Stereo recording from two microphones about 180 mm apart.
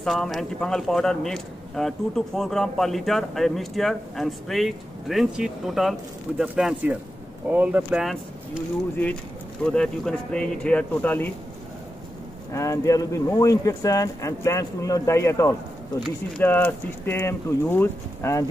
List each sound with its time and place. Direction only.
0.0 s speech: centre (ahead or behind)
9.7 s speech: 5° left (ahead or behind)
12.5 s speech: 15° left (ahead or behind)